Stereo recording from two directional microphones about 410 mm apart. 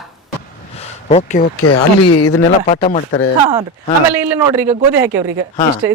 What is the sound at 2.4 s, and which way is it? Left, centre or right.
Speech, centre.